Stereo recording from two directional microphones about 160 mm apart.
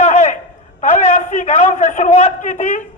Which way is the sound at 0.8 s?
50° left (ahead or behind).